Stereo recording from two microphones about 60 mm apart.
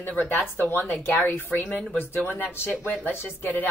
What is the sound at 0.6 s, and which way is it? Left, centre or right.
Speech, left.